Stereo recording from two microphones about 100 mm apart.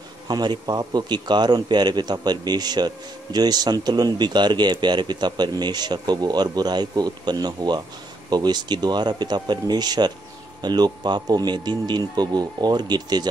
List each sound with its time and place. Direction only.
0.3 s a man's voice: 45° right (ahead or behind)